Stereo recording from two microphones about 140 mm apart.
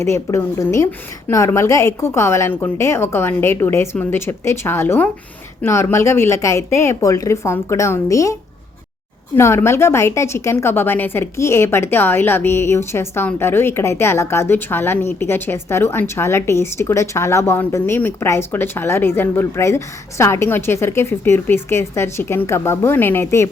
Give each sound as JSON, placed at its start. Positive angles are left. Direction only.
{"t": 0.0, "sound": "a woman's voice", "side_deg": 20}